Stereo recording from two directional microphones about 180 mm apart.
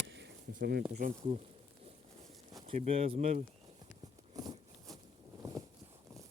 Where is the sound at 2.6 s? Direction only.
35° right (ahead or behind).